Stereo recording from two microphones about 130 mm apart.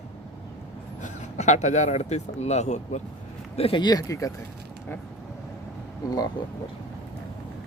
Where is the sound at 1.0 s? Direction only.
60° left (ahead or behind).